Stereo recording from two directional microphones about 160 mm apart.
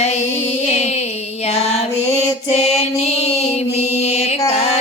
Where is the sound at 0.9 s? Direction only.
40° left (ahead or behind).